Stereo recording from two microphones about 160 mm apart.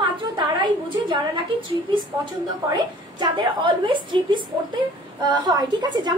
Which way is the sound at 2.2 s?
25° right (ahead or behind).